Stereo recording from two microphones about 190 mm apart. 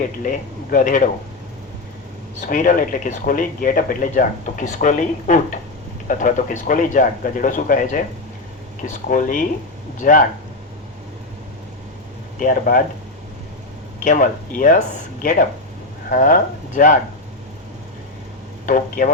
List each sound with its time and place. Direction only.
0.3 s speech: 45° left (ahead or behind)
2.5 s speech: 45° left (ahead or behind)
9.0 s speech: 45° left (ahead or behind)
12.4 s speech: 45° left (ahead or behind)
14.0 s speech: 45° left (ahead or behind)
18.6 s speech: 45° left (ahead or behind)